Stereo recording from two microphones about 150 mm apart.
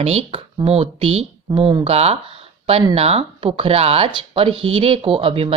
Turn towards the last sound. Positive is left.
turn(degrees=-40)  # may be behind; listen again after turning